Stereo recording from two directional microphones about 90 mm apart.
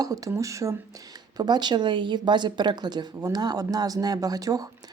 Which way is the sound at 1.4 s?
55° right (ahead or behind).